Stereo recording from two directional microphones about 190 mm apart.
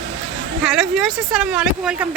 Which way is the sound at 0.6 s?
Centre (ahead or behind).